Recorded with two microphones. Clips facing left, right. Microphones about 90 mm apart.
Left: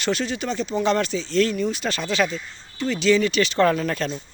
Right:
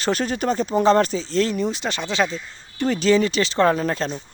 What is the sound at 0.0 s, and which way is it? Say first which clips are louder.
Speech: right 3 dB; 40° right (ahead or behind).